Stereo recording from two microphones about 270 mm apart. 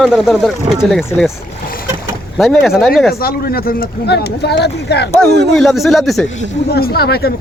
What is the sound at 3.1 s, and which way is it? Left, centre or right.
Speech, left.